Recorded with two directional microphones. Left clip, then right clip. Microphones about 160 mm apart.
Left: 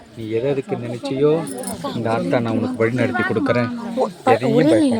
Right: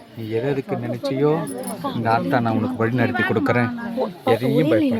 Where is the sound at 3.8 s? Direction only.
10° left (ahead or behind).